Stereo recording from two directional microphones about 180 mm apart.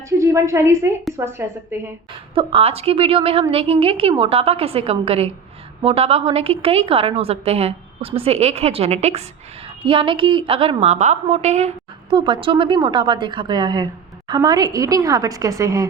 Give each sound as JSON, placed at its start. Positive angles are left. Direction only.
{"t": 0.2, "sound": "a woman's voice", "side_deg": -15}
{"t": 2.3, "sound": "a woman's voice", "side_deg": -30}
{"t": 12.1, "sound": "a woman's voice", "side_deg": -25}